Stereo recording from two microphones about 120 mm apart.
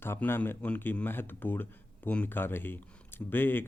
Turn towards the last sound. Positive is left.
turn(degrees=15)  # may be behind; listen again after turning